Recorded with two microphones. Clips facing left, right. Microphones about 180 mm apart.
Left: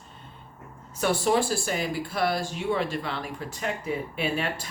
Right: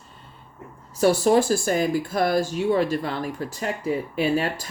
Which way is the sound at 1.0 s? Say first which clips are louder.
Right 6 dB; 40° right (ahead or behind).